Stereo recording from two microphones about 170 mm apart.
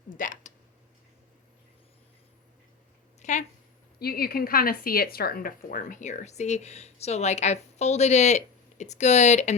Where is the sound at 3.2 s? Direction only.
45° left (ahead or behind).